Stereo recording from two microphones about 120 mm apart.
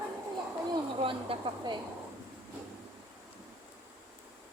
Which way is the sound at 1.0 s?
45° right (ahead or behind).